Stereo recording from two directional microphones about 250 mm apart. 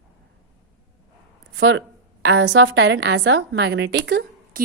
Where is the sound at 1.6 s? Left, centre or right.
Right.